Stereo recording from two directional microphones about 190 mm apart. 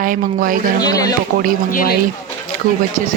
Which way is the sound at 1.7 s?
45° left (ahead or behind).